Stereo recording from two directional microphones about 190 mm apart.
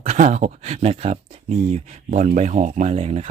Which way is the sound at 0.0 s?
35° right (ahead or behind).